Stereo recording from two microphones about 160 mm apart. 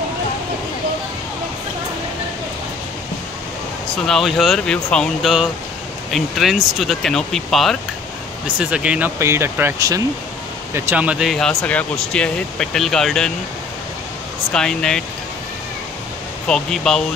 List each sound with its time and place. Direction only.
4.1 s speech: centre (ahead or behind); by 10.0 s 20° right (ahead or behind)
10.7 s speech: 10° right (ahead or behind)
14.5 s speech: 5° left (ahead or behind)
16.4 s speech: 5° left (ahead or behind)